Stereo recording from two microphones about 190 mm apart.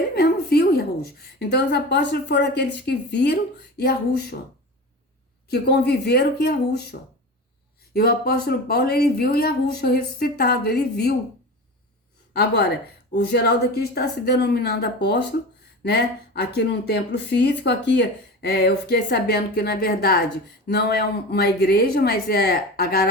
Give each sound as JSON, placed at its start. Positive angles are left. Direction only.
{"t": 0.1, "sound": "a woman's voice", "side_deg": 55}
{"t": 5.5, "sound": "speech", "side_deg": 60}
{"t": 7.9, "sound": "speech", "side_deg": 55}
{"t": 12.3, "sound": "speech", "side_deg": 60}